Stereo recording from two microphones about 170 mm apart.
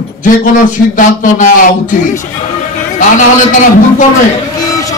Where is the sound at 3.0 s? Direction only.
50° left (ahead or behind).